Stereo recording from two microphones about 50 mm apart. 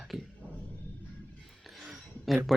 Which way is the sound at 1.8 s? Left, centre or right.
Centre.